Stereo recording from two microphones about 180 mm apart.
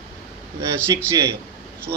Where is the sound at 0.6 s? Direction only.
20° right (ahead or behind).